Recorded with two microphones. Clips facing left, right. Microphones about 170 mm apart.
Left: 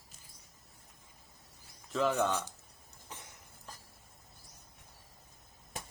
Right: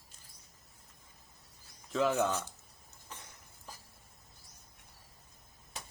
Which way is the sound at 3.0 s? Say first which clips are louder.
Left 1 dB; 20° left (ahead or behind).